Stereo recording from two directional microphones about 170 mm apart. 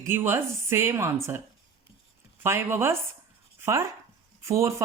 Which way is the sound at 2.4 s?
15° right (ahead or behind).